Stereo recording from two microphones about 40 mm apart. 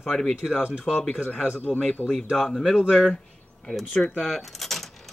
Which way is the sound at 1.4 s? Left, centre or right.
Left.